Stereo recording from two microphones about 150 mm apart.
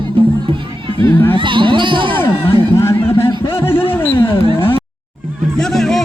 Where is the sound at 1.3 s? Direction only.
35° right (ahead or behind).